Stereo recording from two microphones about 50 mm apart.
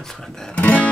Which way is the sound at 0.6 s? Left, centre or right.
Left.